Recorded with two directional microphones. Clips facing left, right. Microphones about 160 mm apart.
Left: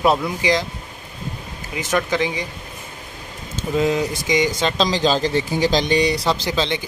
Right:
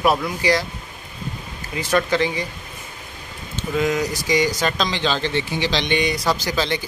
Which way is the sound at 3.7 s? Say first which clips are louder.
Left 2 dB; 30° left (ahead or behind).